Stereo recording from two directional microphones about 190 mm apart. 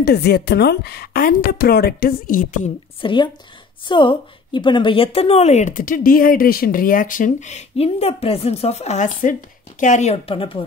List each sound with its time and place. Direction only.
0.0 s a woman's voice: 55° left (ahead or behind)
3.0 s a woman's voice: 25° left (ahead or behind)